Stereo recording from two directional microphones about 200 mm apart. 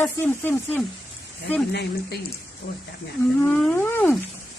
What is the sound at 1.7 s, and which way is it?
Speech, 55° left (ahead or behind).